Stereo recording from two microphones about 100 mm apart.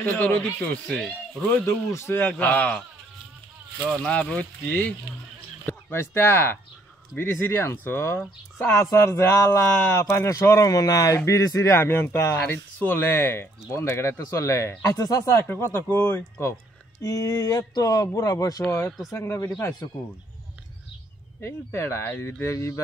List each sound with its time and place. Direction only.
0.0 s speech: 15° left (ahead or behind)
1.5 s speech: 25° left (ahead or behind)
2.3 s speech: 15° left (ahead or behind)
3.9 s speech: 5° left (ahead or behind); by 15.0 s 25° left (ahead or behind)
15.0 s speech: 40° left (ahead or behind)
15.4 s speech: 20° left (ahead or behind)
17.0 s speech: 35° left (ahead or behind)
18.6 s speech: 15° left (ahead or behind)
19.0 s speech: 30° left (ahead or behind)
21.4 s speech: 25° left (ahead or behind)